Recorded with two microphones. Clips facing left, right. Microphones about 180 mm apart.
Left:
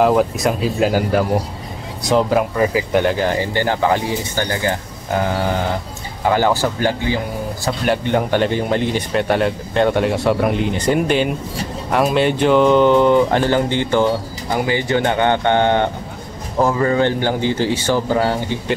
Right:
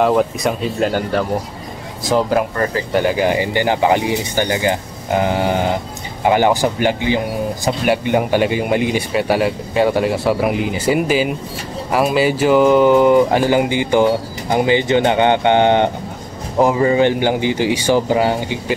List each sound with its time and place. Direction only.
0.0 s speech: centre (ahead or behind)
3.0 s speech: 10° right (ahead or behind)